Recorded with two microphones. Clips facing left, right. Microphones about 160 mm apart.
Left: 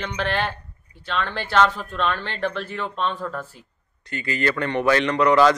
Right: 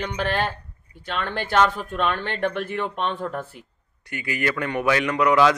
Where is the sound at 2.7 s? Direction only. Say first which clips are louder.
Right 1 dB; 15° right (ahead or behind).